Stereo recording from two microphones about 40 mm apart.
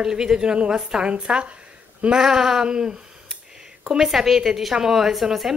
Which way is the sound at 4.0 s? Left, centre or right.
Centre.